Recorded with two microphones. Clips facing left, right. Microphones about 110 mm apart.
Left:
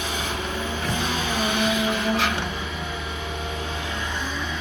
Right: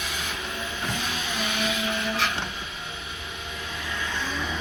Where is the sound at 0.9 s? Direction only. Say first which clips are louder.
Left 5 dB; 30° left (ahead or behind).